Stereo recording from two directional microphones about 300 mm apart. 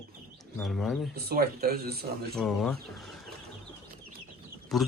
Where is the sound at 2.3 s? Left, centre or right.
Centre.